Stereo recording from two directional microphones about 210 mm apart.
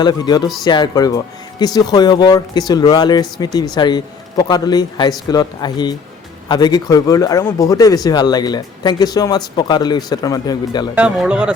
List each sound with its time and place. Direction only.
0.0 s speech: 20° left (ahead or behind)
10.9 s speech: 5° right (ahead or behind)